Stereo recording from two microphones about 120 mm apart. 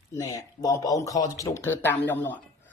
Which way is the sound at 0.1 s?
25° left (ahead or behind).